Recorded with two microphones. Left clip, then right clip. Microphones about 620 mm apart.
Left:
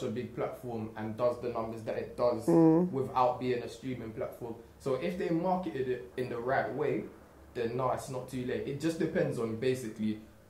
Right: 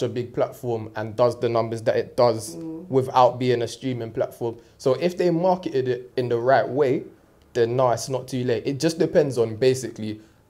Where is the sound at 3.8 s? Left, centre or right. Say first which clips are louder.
Right 11 dB; right.